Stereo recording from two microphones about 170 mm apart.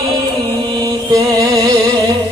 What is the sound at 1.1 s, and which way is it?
Music, 20° right (ahead or behind).